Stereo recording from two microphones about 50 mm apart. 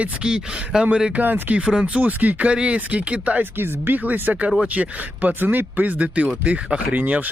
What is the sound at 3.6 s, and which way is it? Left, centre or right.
Speech, right.